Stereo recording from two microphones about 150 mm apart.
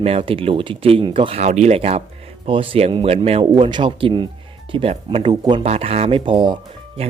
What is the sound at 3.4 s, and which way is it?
Speech, 30° right (ahead or behind).